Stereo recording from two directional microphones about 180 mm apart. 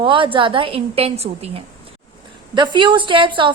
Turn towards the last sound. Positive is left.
turn(degrees=-25)  # may be behind; listen again after turning